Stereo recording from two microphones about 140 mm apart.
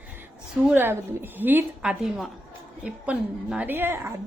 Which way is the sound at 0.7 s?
15° right (ahead or behind).